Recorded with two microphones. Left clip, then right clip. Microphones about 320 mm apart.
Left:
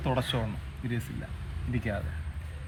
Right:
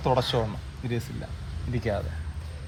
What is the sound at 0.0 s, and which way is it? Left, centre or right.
Speech, right.